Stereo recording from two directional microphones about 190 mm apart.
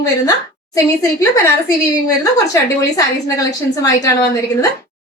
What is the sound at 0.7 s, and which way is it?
Speech, 15° left (ahead or behind).